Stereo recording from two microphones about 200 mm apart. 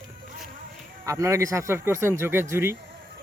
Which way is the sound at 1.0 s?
15° right (ahead or behind).